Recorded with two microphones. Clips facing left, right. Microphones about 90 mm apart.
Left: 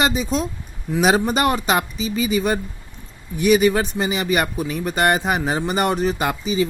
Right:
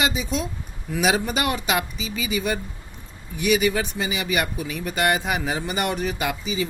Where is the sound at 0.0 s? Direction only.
40° left (ahead or behind).